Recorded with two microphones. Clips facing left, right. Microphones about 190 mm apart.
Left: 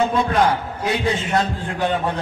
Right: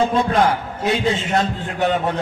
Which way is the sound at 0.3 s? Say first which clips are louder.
Right 1 dB; 25° right (ahead or behind).